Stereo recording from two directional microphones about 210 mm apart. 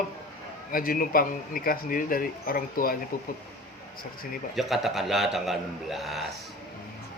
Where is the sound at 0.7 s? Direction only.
40° left (ahead or behind).